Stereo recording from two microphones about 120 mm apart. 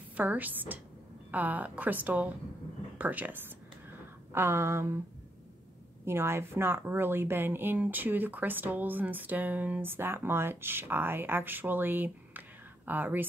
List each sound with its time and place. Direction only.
0.1 s speech: 15° right (ahead or behind)
4.3 s a sound: 20° right (ahead or behind)
6.0 s speech: 20° right (ahead or behind)